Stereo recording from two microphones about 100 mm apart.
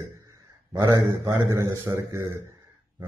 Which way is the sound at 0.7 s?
25° right (ahead or behind).